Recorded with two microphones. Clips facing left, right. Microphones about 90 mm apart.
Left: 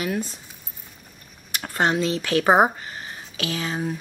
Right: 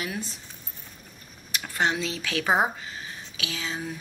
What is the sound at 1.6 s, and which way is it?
Speech, 45° left (ahead or behind).